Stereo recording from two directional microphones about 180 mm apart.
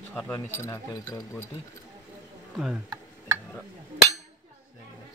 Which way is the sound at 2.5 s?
5° right (ahead or behind).